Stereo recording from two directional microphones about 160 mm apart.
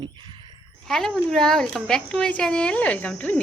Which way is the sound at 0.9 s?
Centre (ahead or behind).